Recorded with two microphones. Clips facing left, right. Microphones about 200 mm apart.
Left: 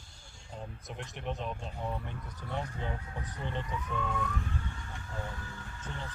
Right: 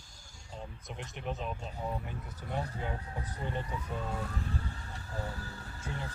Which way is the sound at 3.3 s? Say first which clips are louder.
Even; 30° right (ahead or behind).